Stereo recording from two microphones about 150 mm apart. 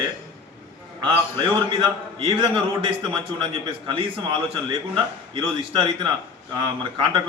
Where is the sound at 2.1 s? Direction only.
35° right (ahead or behind).